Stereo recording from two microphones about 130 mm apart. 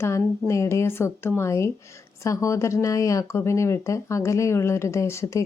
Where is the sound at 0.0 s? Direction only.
20° left (ahead or behind).